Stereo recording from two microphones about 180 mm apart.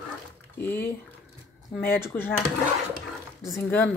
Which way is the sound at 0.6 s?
10° left (ahead or behind).